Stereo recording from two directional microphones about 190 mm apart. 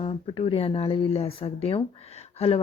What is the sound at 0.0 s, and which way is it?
Speech, 30° left (ahead or behind).